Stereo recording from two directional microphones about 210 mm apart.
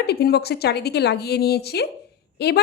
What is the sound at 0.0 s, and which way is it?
Speech, 50° left (ahead or behind).